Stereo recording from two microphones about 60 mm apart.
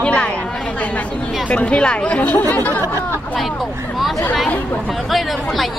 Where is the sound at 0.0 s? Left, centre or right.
Centre.